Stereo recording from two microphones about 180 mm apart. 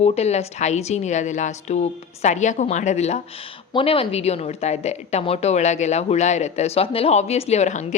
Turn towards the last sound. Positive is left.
turn(degrees=40)  # may be behind; listen again after turning